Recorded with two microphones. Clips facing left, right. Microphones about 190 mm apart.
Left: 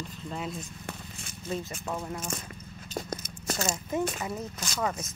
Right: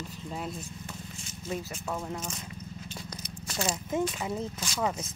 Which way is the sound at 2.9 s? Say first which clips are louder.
Left 6 dB; 50° left (ahead or behind).